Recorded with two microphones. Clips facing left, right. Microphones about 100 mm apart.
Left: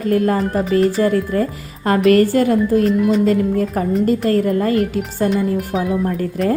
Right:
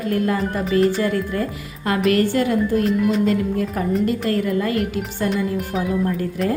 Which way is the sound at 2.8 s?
Centre (ahead or behind).